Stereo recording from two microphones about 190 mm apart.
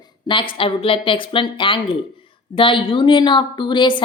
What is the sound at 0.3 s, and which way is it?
A woman's voice, 25° left (ahead or behind).